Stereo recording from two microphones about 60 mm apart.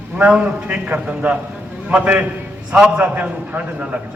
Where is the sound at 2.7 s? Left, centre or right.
Centre.